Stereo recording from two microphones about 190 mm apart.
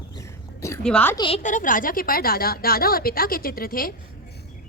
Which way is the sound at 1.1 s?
25° left (ahead or behind).